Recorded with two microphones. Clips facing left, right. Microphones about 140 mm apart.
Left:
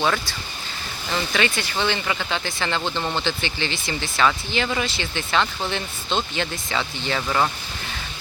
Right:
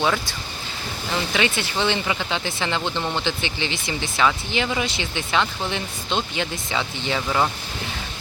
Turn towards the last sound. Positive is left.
turn(degrees=-10)  # may be behind; listen again after turning